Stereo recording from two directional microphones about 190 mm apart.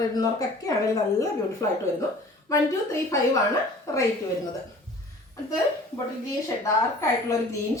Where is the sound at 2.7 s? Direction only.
15° left (ahead or behind).